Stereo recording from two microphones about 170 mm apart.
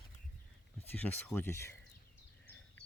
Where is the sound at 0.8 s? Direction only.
10° left (ahead or behind).